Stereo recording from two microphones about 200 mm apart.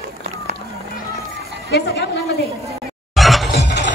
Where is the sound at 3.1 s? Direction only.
Centre (ahead or behind).